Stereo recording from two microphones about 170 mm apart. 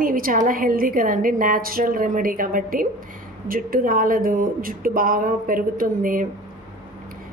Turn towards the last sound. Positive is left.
turn(degrees=-55)  # may be behind; listen again after turning